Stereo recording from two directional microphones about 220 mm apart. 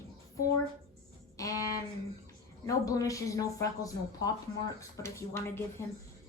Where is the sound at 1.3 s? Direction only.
15° left (ahead or behind).